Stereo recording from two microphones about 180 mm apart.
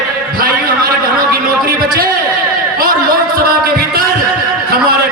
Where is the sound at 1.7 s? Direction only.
55° right (ahead or behind).